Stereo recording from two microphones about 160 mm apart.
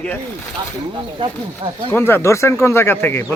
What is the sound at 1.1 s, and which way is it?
Speech, 30° right (ahead or behind).